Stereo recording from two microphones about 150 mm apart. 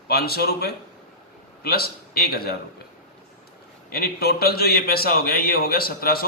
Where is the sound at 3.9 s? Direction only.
90° left.